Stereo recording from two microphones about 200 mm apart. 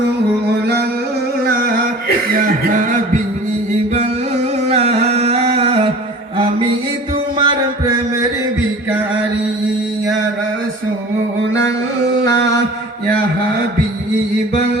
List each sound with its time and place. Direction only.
1.5 s music: 50° right (ahead or behind)
2.4 s a sound: 40° right (ahead or behind)
4.7 s music: 30° right (ahead or behind)
7.3 s music: 25° right (ahead or behind)